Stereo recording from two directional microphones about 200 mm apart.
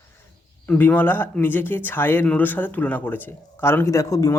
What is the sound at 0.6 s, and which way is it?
Speech, 10° left (ahead or behind).